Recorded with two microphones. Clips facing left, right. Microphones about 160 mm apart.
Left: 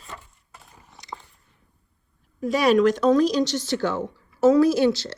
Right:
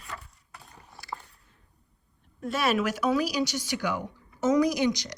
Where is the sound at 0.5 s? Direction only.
Centre (ahead or behind).